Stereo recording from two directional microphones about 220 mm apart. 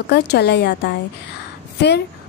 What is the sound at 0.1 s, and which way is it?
Speech, 50° left (ahead or behind).